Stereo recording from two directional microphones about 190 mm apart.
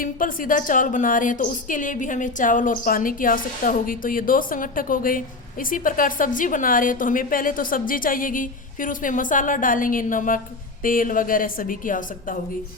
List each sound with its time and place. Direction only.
0.0 s a woman's voice: 45° left (ahead or behind)